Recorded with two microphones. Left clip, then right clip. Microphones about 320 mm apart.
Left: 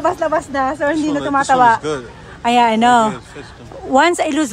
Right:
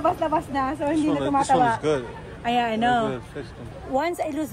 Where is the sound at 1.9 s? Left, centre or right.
Centre.